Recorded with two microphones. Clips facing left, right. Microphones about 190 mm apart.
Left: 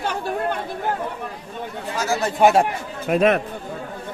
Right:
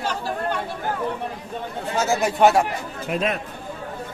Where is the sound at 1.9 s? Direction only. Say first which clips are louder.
Right 2 dB; 25° right (ahead or behind).